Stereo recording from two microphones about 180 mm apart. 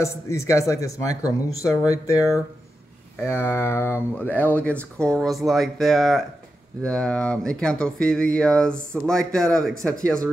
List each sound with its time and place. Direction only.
0.0 s speech: 15° left (ahead or behind)